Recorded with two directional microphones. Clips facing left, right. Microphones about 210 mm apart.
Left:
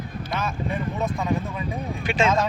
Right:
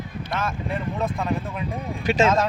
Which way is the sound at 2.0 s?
40° right (ahead or behind).